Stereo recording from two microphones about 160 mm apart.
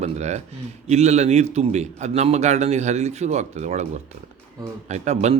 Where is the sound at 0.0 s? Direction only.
45° right (ahead or behind).